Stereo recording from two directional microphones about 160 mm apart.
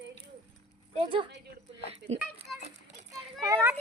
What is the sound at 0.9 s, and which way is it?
Speech, 30° right (ahead or behind).